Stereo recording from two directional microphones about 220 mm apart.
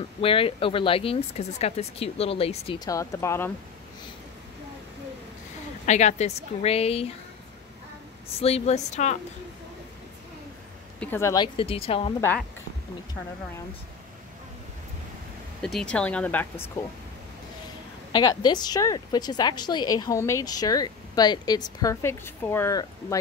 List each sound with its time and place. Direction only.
0.2 s speech: 25° left (ahead or behind)
5.9 s speech: 30° left (ahead or behind)
8.4 s speech: 25° left (ahead or behind)
11.0 s speech: 10° left (ahead or behind); by 12.1 s 25° left (ahead or behind)
12.2 s a woman's voice: 10° left (ahead or behind)
15.6 s speech: 5° left (ahead or behind)
18.1 s a woman's voice: 20° left (ahead or behind)